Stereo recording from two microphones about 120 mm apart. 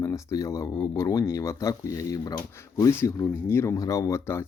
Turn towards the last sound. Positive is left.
turn(degrees=20)  # may be behind; listen again after turning